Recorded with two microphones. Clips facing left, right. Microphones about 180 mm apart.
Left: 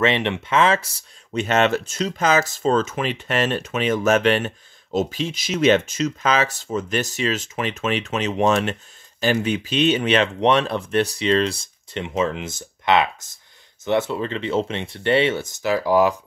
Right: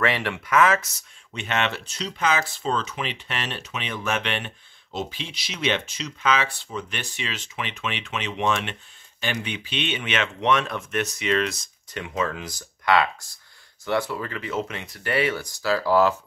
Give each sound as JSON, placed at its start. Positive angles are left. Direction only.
{"t": 0.0, "sound": "speech", "side_deg": 20}